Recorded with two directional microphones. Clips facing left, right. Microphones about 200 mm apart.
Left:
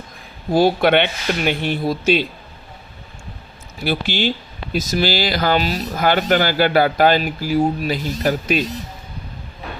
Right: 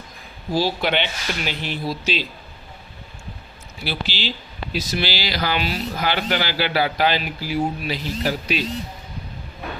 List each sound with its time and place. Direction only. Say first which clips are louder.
0.5 s speech: left 7 dB; 55° left (ahead or behind)
3.8 s speech: left 7 dB; 50° left (ahead or behind)